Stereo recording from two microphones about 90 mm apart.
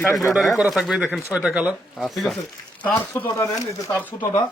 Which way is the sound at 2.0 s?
Centre (ahead or behind).